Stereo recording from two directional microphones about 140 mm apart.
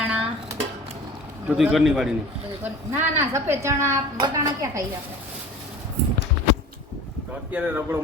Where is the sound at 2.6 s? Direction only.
15° right (ahead or behind).